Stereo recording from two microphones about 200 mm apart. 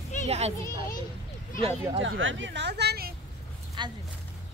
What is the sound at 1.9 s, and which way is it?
Speech, 75° right (ahead or behind).